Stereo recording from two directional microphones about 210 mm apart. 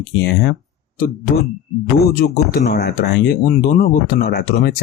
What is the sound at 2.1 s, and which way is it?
Speech, 50° left (ahead or behind).